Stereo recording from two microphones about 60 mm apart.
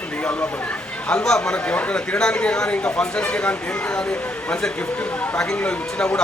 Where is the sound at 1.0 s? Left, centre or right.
Centre.